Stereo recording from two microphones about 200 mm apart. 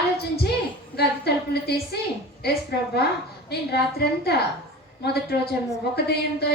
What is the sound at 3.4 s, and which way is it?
A woman's voice, 55° left (ahead or behind).